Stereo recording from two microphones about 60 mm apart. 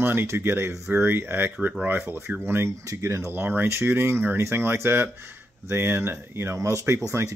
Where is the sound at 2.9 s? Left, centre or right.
Right.